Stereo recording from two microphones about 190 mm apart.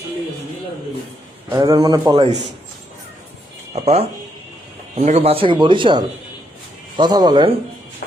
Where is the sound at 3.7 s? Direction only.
35° right (ahead or behind).